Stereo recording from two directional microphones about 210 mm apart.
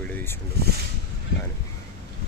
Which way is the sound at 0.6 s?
50° right (ahead or behind).